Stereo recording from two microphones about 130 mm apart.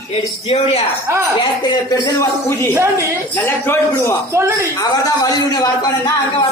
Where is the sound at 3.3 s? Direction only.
15° left (ahead or behind).